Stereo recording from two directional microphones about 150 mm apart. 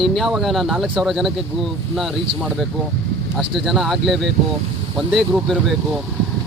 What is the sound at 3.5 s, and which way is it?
Speech, centre (ahead or behind).